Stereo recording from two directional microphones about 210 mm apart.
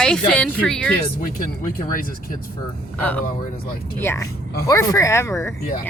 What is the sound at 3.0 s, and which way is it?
Speech, 5° left (ahead or behind).